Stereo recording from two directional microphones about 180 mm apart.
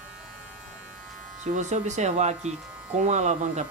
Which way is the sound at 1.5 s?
40° right (ahead or behind).